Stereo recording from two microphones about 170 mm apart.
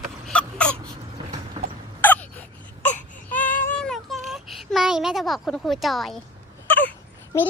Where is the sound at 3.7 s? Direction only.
5° left (ahead or behind).